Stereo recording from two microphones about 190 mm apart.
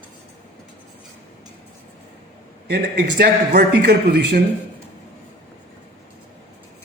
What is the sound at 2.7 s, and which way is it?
A man's voice, 60° right (ahead or behind).